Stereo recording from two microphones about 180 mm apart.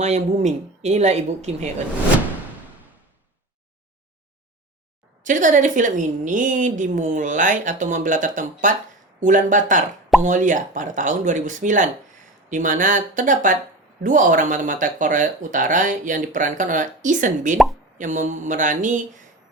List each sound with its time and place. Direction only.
0.0 s speech: 40° right (ahead or behind)
5.2 s speech: 45° right (ahead or behind)